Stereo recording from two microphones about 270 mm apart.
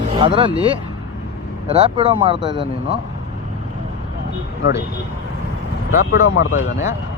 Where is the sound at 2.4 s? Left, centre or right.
Left.